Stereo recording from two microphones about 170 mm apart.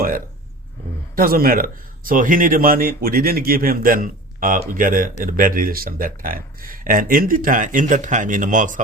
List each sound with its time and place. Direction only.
1.1 s speech: 60° right (ahead or behind)